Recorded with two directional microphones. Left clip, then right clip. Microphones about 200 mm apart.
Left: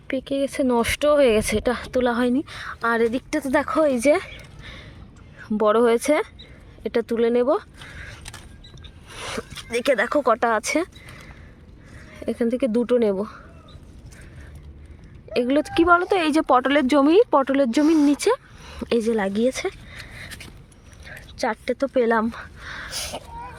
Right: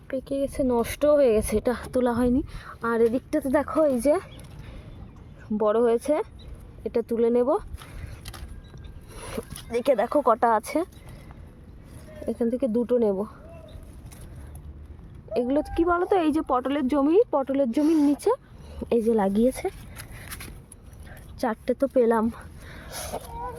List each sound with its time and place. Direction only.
0.1 s speech: centre (ahead or behind)
5.5 s speech: 10° left (ahead or behind)
9.0 s speech: 5° right (ahead or behind)
12.2 s speech: 5° left (ahead or behind)
15.3 s speech: centre (ahead or behind)
17.9 s speech: 30° left (ahead or behind)
18.2 s speech: centre (ahead or behind)
19.9 s a sound: 60° right (ahead or behind)
21.1 s a sound: 10° right (ahead or behind)
21.8 s speech: 5° right (ahead or behind)
22.9 s speech: 20° left (ahead or behind)